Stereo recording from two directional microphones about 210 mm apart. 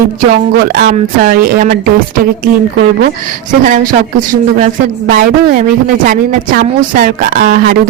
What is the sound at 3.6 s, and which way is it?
A woman's voice, 40° right (ahead or behind).